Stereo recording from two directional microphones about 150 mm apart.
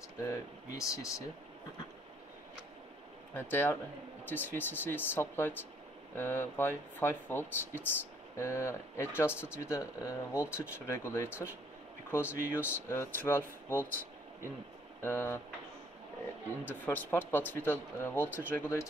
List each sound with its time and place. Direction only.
0.3 s speech: 20° left (ahead or behind)
3.3 s speech: 15° left (ahead or behind)
15.0 s speech: 15° left (ahead or behind)
16.6 s speech: 10° left (ahead or behind)